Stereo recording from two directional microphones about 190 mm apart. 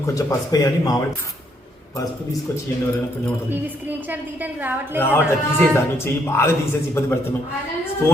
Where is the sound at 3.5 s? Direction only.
10° right (ahead or behind).